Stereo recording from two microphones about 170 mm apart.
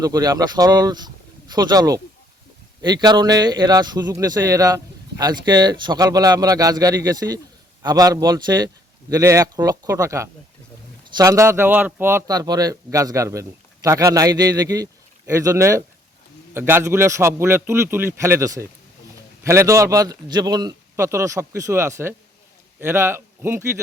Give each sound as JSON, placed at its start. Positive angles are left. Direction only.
{"t": 0.0, "sound": "a man's voice", "side_deg": -20}